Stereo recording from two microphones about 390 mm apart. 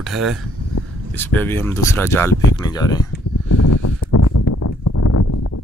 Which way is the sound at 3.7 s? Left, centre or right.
Left.